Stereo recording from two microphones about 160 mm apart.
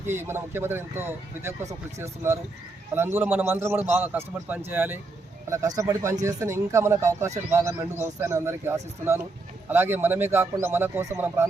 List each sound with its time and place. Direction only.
0.0 s a man's voice: 15° right (ahead or behind)